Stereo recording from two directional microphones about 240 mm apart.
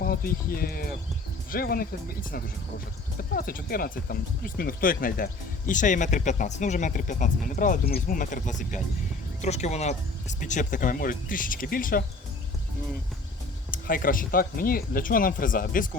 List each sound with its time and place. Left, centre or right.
0.0 s speech: left
3.2 s speech: left
13.7 s speech: left